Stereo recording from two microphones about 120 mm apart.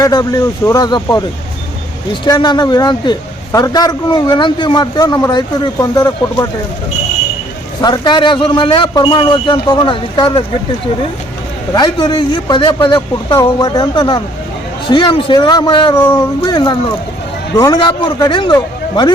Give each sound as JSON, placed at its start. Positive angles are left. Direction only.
{"t": 0.0, "sound": "a man's voice", "side_deg": 30}
{"t": 2.2, "sound": "a man's voice", "side_deg": 35}
{"t": 7.8, "sound": "a man's voice", "side_deg": 40}
{"t": 11.7, "sound": "a man's voice", "side_deg": 40}